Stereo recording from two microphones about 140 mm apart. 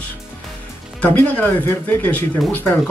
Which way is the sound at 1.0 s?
10° left (ahead or behind).